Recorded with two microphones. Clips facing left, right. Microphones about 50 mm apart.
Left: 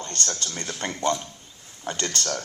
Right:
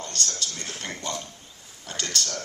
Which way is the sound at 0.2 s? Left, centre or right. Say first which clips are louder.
Left 2 dB; left.